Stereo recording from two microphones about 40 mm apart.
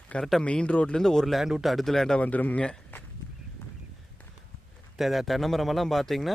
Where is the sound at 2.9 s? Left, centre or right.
Left.